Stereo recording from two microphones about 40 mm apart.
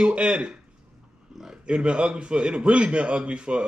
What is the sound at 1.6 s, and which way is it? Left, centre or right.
A man's voice, right.